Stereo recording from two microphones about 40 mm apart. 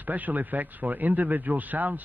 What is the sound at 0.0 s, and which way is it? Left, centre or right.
Speech, right.